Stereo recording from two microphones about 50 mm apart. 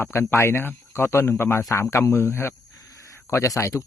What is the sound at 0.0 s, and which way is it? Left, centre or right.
Speech, left.